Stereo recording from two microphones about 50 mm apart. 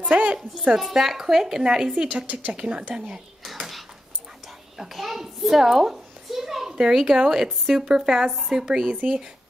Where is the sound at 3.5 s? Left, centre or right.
Centre.